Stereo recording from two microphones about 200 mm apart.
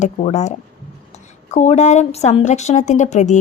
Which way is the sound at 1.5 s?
35° left (ahead or behind).